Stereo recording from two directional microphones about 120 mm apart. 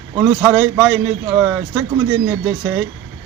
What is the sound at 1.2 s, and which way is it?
Speech, 15° right (ahead or behind).